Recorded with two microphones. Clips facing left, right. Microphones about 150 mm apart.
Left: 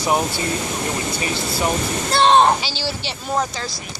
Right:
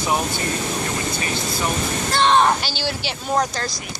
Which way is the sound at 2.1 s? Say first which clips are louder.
Left 3 dB; 30° left (ahead or behind).